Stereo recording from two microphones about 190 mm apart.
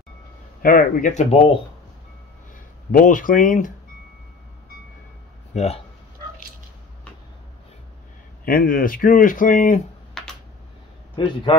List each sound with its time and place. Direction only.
0.6 s speech: 50° left (ahead or behind)
2.9 s speech: 45° left (ahead or behind)
5.5 s speech: 35° left (ahead or behind)
8.5 s speech: 45° left (ahead or behind)
10.2 s a sound: 5° left (ahead or behind)
11.2 s a man's voice: 25° left (ahead or behind)